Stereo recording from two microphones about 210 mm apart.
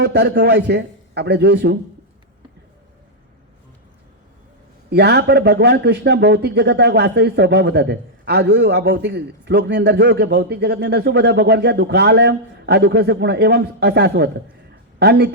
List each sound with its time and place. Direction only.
0.0 s speech: 55° right (ahead or behind)
4.9 s speech: 50° right (ahead or behind)